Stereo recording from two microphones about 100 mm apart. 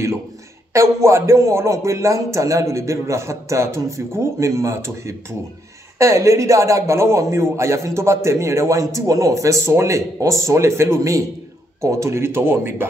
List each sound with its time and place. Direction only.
0.7 s a man's voice: 30° right (ahead or behind)